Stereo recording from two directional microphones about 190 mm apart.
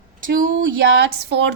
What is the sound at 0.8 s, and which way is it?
Speech, 65° right (ahead or behind).